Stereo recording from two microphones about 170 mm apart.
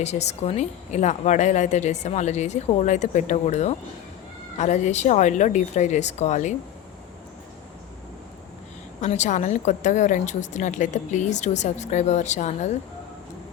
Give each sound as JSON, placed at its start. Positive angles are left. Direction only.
{"t": 0.0, "sound": "speech", "side_deg": 40}
{"t": 9.0, "sound": "speech", "side_deg": 45}